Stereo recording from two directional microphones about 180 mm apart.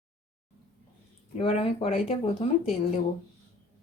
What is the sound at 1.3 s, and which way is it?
Speech, 30° left (ahead or behind).